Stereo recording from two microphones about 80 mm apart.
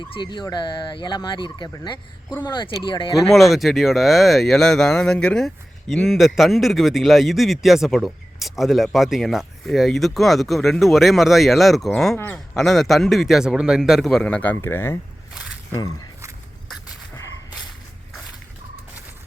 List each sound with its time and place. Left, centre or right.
0.0 s gobble: left
2.5 s speech: left
3.2 s speech: centre
14.3 s speech: centre
14.6 s speech: left